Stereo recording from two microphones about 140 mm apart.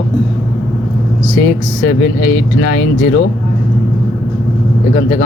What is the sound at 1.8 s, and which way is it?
Speech, 75° left (ahead or behind).